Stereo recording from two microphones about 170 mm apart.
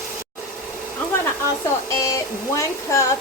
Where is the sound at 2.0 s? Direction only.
20° left (ahead or behind).